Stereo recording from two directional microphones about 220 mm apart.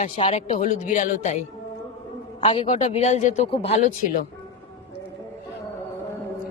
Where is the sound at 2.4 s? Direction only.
20° left (ahead or behind).